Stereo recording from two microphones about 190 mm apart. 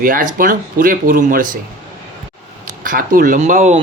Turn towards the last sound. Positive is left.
turn(degrees=-40)  # may be behind; listen again after turning